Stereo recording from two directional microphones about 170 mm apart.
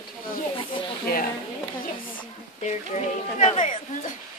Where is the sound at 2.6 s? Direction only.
40° left (ahead or behind).